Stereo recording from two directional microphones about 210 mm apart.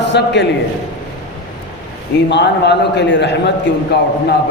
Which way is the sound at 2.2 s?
55° left (ahead or behind).